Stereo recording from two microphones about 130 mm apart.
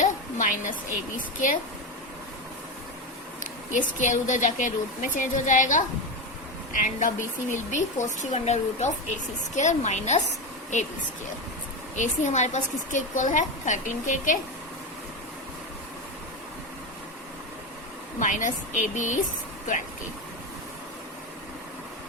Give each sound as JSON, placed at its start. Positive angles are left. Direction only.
{"t": 0.0, "sound": "a sound", "side_deg": 75}
{"t": 3.4, "sound": "speech", "side_deg": 75}
{"t": 7.5, "sound": "a woman's voice", "side_deg": 70}
{"t": 11.9, "sound": "a woman's voice", "side_deg": 65}
{"t": 18.2, "sound": "a woman's voice", "side_deg": 75}